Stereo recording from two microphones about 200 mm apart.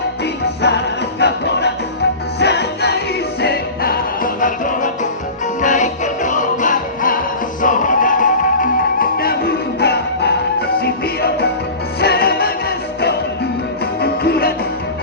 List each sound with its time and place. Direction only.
1.2 s music: 60° left (ahead or behind)